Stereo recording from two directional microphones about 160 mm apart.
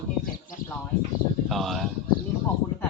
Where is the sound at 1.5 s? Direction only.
Centre (ahead or behind).